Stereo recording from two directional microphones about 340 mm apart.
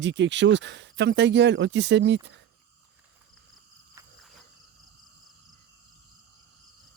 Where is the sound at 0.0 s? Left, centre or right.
Right.